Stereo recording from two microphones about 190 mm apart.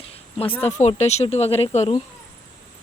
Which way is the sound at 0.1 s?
30° left (ahead or behind).